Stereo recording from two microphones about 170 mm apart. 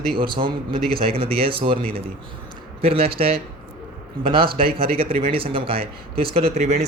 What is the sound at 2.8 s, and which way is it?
A man's voice, 35° right (ahead or behind).